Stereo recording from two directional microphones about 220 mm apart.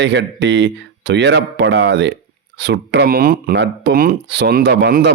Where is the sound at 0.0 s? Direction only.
55° right (ahead or behind).